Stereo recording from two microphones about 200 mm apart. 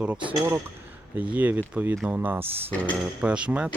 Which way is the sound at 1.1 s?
10° right (ahead or behind).